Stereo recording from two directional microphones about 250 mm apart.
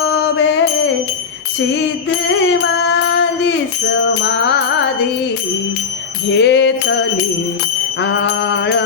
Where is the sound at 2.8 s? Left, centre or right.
Left.